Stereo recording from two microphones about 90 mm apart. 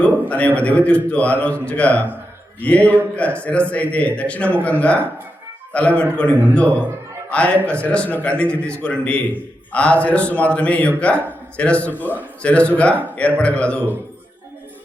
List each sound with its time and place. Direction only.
0.0 s a man's voice: 15° left (ahead or behind)